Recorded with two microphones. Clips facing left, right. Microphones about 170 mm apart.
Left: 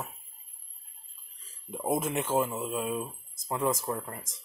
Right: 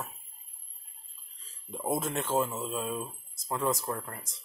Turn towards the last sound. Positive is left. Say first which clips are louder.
# left 2 dB
turn(degrees=15)  # may be behind; listen again after turning